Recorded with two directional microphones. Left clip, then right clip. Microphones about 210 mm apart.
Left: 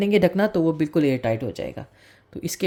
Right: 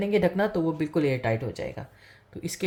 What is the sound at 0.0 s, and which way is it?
Speech, 55° left (ahead or behind).